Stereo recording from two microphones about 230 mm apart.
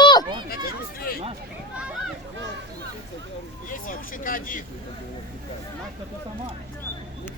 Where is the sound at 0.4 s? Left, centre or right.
Left.